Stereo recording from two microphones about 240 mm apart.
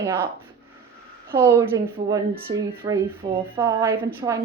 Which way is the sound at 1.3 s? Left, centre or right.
Centre.